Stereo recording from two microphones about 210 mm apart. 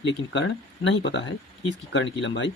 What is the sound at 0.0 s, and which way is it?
Speech, 55° left (ahead or behind).